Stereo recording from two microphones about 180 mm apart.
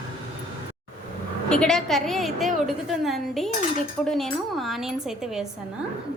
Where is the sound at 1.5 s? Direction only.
5° left (ahead or behind).